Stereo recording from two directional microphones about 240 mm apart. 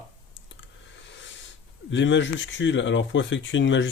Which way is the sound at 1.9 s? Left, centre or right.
Left.